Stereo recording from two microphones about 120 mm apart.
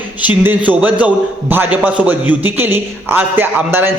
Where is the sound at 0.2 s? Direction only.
15° right (ahead or behind).